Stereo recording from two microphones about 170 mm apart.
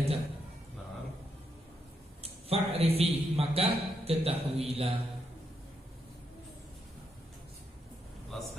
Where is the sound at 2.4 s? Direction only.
35° right (ahead or behind).